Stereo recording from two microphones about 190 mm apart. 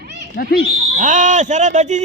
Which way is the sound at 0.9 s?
40° right (ahead or behind).